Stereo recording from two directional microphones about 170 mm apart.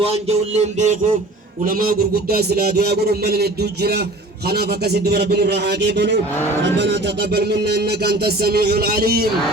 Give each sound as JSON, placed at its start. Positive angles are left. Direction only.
{"t": 0.0, "sound": "music", "side_deg": -40}
{"t": 1.6, "sound": "music", "side_deg": -55}